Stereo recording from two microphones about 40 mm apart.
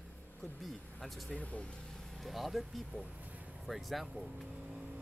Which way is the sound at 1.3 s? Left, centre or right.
Left.